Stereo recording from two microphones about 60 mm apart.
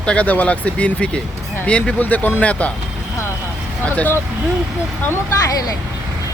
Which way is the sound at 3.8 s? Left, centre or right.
Left.